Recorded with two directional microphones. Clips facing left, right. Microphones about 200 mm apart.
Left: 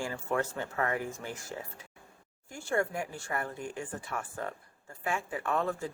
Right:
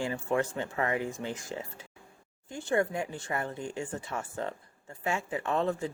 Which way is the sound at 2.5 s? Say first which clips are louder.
Right 3 dB; 20° right (ahead or behind).